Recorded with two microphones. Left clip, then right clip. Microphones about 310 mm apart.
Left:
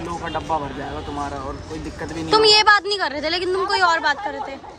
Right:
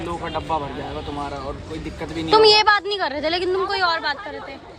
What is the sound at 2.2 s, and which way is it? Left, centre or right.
A woman's voice, centre.